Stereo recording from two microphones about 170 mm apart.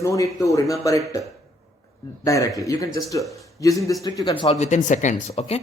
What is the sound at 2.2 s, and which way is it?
A man's voice, 20° left (ahead or behind).